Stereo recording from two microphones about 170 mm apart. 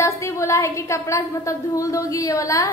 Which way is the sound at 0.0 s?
15° left (ahead or behind).